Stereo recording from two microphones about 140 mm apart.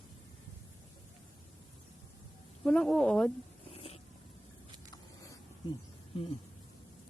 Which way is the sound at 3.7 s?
45° left (ahead or behind).